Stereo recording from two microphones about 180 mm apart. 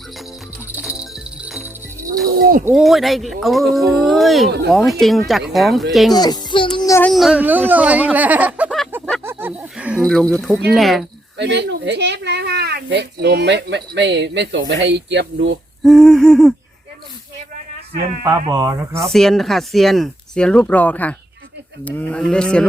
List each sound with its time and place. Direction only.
0.8 s music: 5° right (ahead or behind)
2.4 s a sound: 50° right (ahead or behind)
2.7 s speech: centre (ahead or behind)
6.1 s music: 25° left (ahead or behind)
6.7 s child singing: 20° left (ahead or behind)
7.0 s speech: centre (ahead or behind)
11.3 s speech: 70° right (ahead or behind)
15.8 s speech: centre (ahead or behind)
18.4 s speech: 20° right (ahead or behind)
19.1 s speech: centre (ahead or behind)